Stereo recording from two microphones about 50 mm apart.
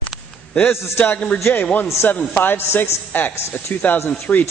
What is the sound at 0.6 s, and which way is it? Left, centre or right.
Speech, left.